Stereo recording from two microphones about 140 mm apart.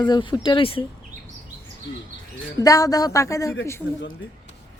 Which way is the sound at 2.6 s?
25° left (ahead or behind).